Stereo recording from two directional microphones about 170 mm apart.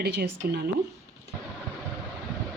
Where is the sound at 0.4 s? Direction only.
65° right (ahead or behind).